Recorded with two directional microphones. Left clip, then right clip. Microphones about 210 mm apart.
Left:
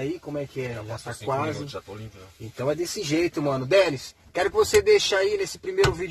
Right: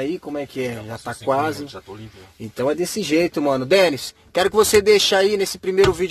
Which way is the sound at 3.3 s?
50° right (ahead or behind).